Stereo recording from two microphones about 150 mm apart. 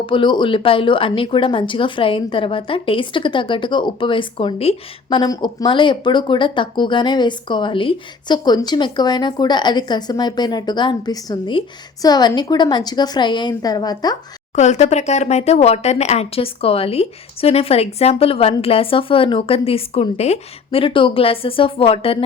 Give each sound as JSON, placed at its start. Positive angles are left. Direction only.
{"t": 0.0, "sound": "a woman's voice", "side_deg": 35}
{"t": 14.5, "sound": "a woman's voice", "side_deg": 50}